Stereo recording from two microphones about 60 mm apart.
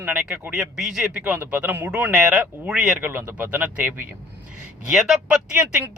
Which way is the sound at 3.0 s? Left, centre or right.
Right.